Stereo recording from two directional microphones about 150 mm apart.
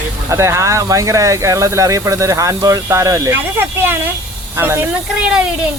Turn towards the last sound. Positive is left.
turn(degrees=-5)  # may be behind; listen again after turning